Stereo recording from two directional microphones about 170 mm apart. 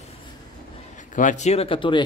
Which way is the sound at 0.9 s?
50° left (ahead or behind).